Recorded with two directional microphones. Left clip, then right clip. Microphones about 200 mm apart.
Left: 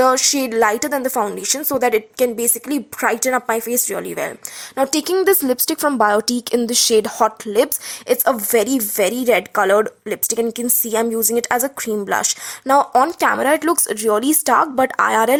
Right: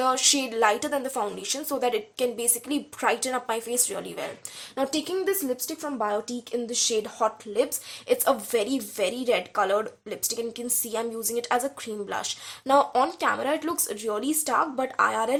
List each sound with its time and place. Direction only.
0.0 s a woman's voice: 40° left (ahead or behind)